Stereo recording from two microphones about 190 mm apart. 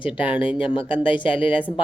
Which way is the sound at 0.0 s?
5° right (ahead or behind).